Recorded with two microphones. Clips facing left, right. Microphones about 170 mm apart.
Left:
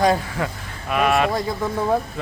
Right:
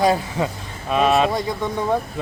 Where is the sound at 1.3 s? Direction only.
5° left (ahead or behind).